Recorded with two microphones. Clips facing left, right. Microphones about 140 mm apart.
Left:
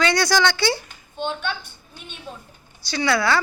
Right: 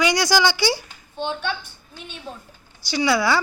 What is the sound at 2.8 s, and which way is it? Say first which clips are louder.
Speech: right 1 dB; 15° right (ahead or behind).